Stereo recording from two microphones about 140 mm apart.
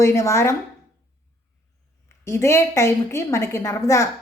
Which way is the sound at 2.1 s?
20° left (ahead or behind).